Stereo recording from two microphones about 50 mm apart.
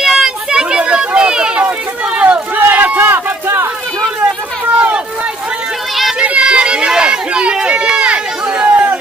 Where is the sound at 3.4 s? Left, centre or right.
Right.